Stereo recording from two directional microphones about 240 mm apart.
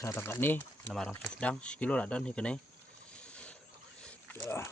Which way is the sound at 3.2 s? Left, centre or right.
Centre.